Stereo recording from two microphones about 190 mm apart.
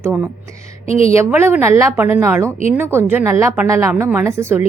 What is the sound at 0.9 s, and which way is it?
Speech, 30° left (ahead or behind).